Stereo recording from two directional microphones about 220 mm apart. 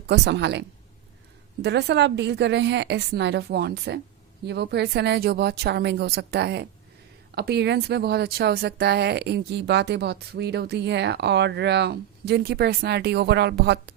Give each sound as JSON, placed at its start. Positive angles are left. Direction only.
{"t": 0.1, "sound": "speech", "side_deg": -50}
{"t": 1.6, "sound": "speech", "side_deg": -50}